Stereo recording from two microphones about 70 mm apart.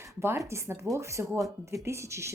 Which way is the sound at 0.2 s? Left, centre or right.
Right.